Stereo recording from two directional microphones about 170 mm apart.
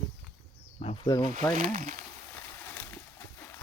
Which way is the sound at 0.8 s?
40° left (ahead or behind).